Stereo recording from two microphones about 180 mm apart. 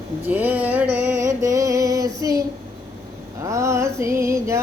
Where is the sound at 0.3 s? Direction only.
10° right (ahead or behind).